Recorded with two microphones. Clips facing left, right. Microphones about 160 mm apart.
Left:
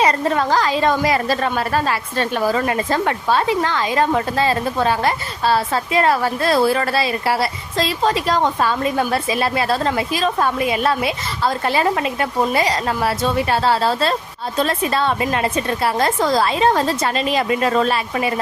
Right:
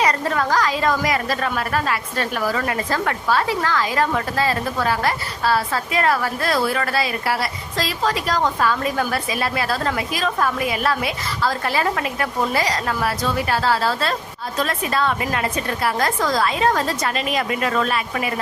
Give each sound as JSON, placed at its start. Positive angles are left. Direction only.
{"t": 0.0, "sound": "a woman's voice", "side_deg": 25}